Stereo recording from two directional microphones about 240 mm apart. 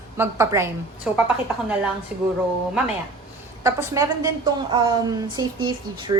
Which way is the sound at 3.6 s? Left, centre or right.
Centre.